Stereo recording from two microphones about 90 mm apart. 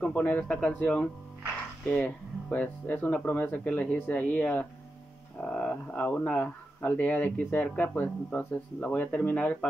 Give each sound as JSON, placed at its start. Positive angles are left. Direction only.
{"t": 0.0, "sound": "speech", "side_deg": 20}